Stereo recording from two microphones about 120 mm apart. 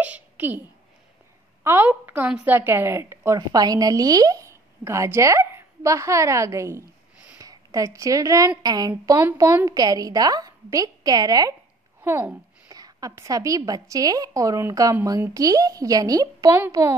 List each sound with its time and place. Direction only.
0.0 s a sound: 15° right (ahead or behind)
1.6 s a woman's voice: 20° right (ahead or behind)
12.0 s a child's voice: 15° right (ahead or behind)
12.6 s a woman's voice: 30° right (ahead or behind)